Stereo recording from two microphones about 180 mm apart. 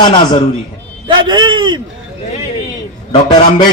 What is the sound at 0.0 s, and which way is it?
Speech, 25° left (ahead or behind).